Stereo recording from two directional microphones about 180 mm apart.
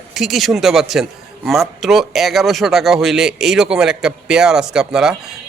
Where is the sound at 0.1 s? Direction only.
Centre (ahead or behind).